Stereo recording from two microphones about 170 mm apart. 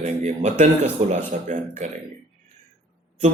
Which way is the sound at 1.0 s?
40° right (ahead or behind).